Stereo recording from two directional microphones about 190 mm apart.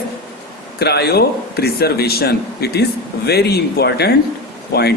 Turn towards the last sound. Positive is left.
turn(degrees=60)  # may be behind; listen again after turning